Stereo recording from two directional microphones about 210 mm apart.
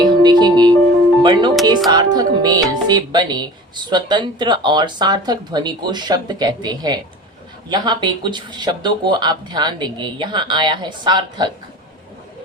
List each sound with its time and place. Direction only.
0.0 s speech: 20° right (ahead or behind)